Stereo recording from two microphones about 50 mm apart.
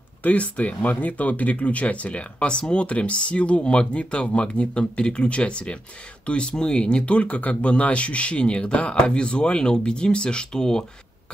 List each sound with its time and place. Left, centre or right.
0.2 s speech: left